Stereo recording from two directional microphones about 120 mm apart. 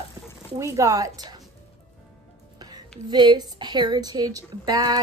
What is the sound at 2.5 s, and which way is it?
Music, 35° right (ahead or behind).